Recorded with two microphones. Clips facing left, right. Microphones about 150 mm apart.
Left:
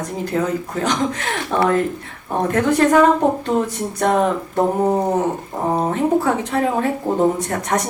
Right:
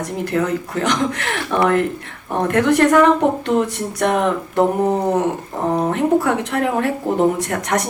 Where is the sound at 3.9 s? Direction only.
70° right (ahead or behind).